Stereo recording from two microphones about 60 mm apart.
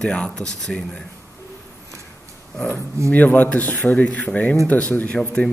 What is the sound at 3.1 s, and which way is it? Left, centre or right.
Speech, left.